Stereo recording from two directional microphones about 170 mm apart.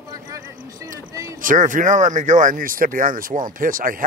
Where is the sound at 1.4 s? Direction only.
50° right (ahead or behind).